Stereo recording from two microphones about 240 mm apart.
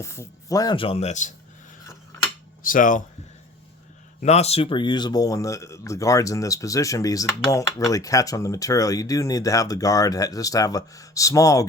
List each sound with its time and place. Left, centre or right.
0.0 s speech: centre; by 1.3 s left
2.6 s speech: left
4.2 s speech: left